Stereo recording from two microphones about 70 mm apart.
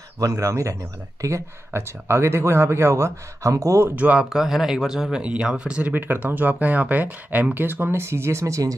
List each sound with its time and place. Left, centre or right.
0.2 s speech: right
3.9 s speech: right
4.3 s speech: centre; by 8.7 s right